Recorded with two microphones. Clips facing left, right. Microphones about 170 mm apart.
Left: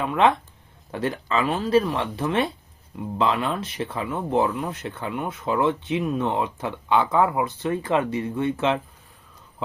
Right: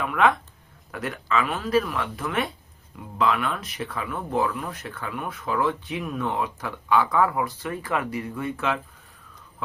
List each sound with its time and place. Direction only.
0.0 s speech: 25° left (ahead or behind)